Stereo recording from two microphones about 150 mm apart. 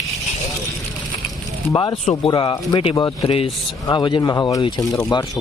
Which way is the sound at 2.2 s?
30° left (ahead or behind).